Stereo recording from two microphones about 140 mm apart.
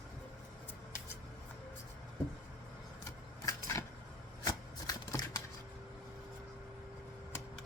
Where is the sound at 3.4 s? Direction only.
20° left (ahead or behind).